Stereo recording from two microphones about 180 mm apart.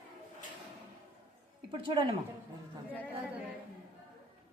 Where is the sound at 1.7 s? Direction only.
25° right (ahead or behind).